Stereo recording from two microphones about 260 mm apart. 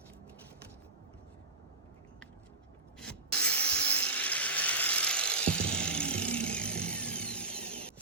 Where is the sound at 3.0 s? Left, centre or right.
Centre.